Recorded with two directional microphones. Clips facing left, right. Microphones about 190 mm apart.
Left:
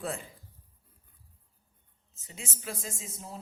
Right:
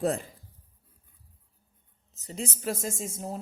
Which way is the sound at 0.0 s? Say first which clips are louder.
Right 9 dB; 40° right (ahead or behind).